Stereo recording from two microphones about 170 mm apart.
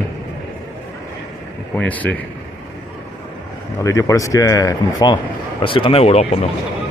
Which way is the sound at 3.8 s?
20° left (ahead or behind).